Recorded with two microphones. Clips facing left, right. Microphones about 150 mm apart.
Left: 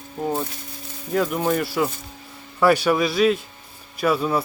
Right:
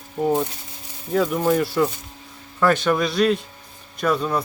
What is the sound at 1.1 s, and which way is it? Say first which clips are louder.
Speech: right 2 dB; centre (ahead or behind).